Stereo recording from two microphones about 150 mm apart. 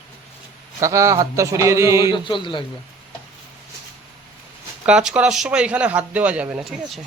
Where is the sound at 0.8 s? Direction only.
20° right (ahead or behind).